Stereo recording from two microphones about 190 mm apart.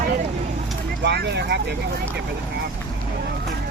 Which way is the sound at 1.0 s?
60° right (ahead or behind).